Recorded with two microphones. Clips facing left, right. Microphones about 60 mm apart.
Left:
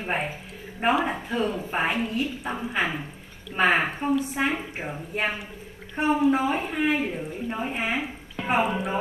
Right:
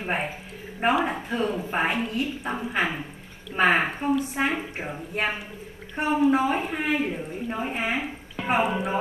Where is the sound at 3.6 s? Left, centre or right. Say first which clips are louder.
Right 1 dB; right.